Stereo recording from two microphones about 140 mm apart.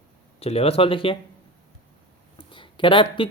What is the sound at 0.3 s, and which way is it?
Speech, 45° left (ahead or behind).